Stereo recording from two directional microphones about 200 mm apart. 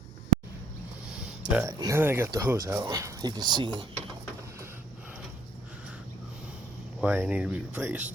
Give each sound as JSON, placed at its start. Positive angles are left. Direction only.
{"t": 1.5, "sound": "speech", "side_deg": -5}
{"t": 7.0, "sound": "speech", "side_deg": -10}